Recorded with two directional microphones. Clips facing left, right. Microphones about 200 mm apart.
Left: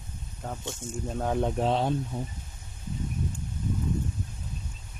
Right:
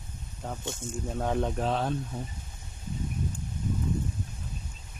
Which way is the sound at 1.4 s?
20° left (ahead or behind).